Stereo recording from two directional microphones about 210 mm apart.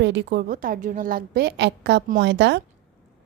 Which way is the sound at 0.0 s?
55° right (ahead or behind).